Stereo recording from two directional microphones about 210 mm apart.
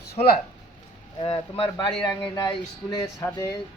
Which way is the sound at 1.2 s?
25° left (ahead or behind).